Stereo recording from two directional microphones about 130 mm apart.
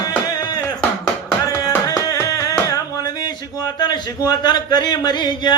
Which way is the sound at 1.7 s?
25° left (ahead or behind).